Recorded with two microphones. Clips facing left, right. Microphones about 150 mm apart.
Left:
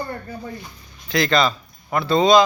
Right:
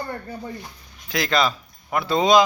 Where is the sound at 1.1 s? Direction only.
5° right (ahead or behind).